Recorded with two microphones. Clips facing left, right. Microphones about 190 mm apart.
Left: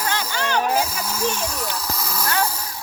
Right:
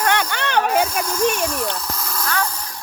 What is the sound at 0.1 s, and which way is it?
Snake, 65° right (ahead or behind).